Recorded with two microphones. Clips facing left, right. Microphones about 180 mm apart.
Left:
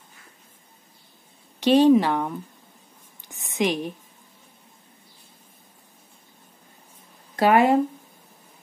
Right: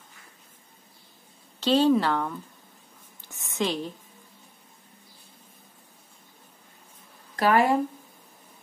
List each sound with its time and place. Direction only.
1.6 s speech: 15° left (ahead or behind)
3.2 s whispering: 15° left (ahead or behind)
7.3 s speech: 25° left (ahead or behind)